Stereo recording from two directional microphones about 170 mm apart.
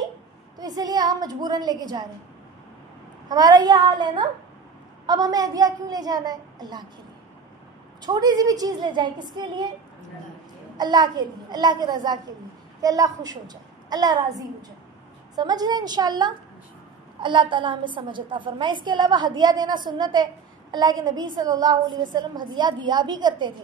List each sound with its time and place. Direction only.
0.6 s a woman's voice: 20° right (ahead or behind)
3.3 s a woman's voice: 25° right (ahead or behind)
8.0 s a woman's voice: 25° right (ahead or behind)
10.8 s a woman's voice: 25° right (ahead or behind)